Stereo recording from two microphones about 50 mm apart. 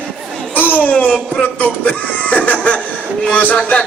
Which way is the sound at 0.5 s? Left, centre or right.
Left.